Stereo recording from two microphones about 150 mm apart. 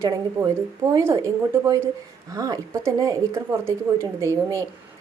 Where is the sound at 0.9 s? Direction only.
20° right (ahead or behind).